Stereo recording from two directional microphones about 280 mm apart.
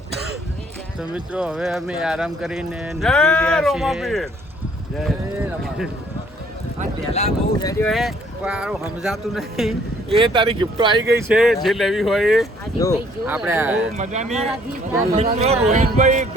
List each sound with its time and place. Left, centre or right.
0.9 s speech: centre
7.1 s speech: centre
7.9 s speech: centre
10.1 s speech: centre
11.3 s speech: centre
13.9 s speech: right